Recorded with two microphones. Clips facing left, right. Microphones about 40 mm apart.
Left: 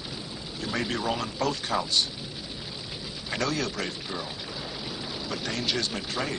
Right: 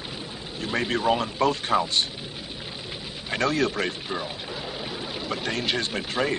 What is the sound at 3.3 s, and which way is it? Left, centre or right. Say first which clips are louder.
Speech: right 5 dB; right.